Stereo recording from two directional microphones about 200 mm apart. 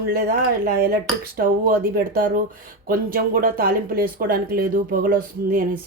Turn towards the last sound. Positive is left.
turn(degrees=-45)  # may be behind; listen again after turning